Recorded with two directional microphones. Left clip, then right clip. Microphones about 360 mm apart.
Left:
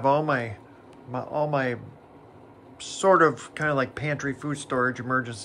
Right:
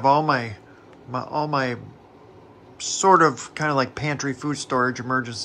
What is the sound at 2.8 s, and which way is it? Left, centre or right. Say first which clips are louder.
Speech: right 3 dB; centre.